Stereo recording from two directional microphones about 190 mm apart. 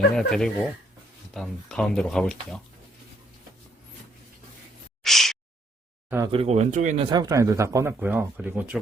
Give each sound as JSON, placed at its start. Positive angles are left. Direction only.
{"t": 0.1, "sound": "speech", "side_deg": 5}
{"t": 5.0, "sound": "a sound", "side_deg": 0}
{"t": 6.1, "sound": "speech", "side_deg": -15}
{"t": 6.3, "sound": "speech", "side_deg": -30}
{"t": 7.1, "sound": "speech", "side_deg": -20}